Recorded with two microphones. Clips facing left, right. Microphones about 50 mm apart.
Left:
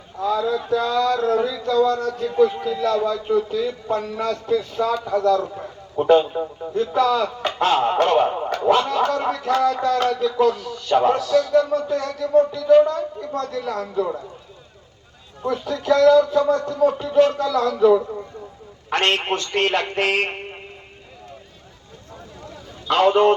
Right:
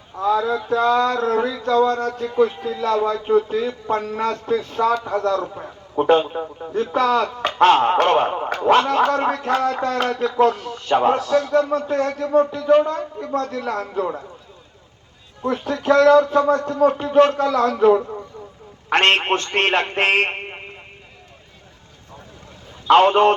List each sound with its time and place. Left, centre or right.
0.2 s speech: right
15.4 s speech: right
22.9 s speech: right